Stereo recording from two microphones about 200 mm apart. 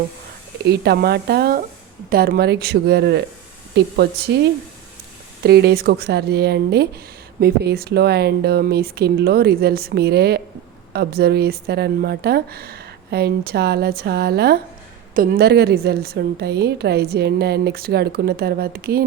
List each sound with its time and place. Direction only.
0.6 s a woman's voice: 55° right (ahead or behind)
5.4 s a woman's voice: 55° right (ahead or behind)